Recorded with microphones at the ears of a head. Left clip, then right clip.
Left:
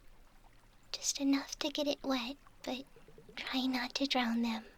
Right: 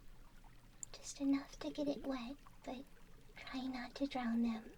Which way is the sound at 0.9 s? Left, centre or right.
Left.